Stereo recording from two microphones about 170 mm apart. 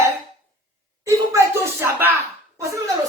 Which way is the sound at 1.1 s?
15° right (ahead or behind).